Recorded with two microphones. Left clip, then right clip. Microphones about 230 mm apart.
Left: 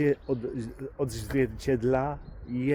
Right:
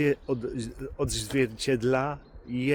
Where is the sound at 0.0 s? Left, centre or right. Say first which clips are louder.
Even; centre.